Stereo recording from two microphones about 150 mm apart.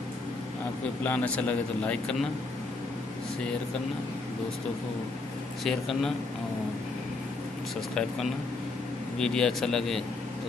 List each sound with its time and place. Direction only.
1.0 s speech: 10° left (ahead or behind)
5.6 s speech: centre (ahead or behind)
9.2 s speech: 5° left (ahead or behind)